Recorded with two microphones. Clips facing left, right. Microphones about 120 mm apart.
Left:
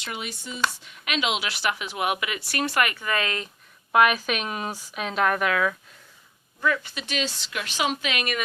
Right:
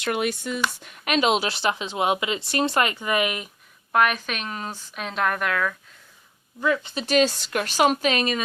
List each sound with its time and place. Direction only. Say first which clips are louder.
0.0 s speech: right 10 dB; 60° right (ahead or behind)
0.8 s speech: right 6 dB; 45° right (ahead or behind); by 3.5 s 15° right (ahead or behind)
3.9 s a woman's voice: left 2 dB; 5° left (ahead or behind)
6.6 s speech: right 2 dB; 20° right (ahead or behind)
6.9 s speech: right 10 dB; 40° right (ahead or behind)